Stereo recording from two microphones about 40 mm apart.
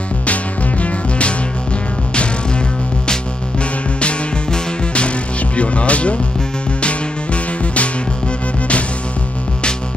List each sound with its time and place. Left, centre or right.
0.3 s music: left
4.0 s music: left